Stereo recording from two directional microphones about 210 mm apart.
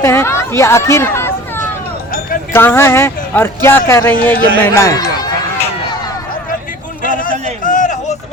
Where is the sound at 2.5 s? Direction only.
10° left (ahead or behind).